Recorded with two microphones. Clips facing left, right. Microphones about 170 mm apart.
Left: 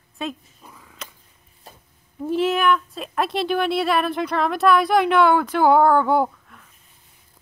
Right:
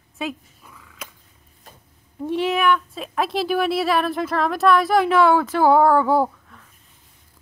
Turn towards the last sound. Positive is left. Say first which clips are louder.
# right 1 dB
turn(degrees=0)  # may be behind; listen again after turning